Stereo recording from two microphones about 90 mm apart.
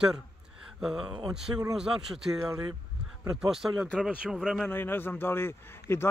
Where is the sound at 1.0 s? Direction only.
60° right (ahead or behind).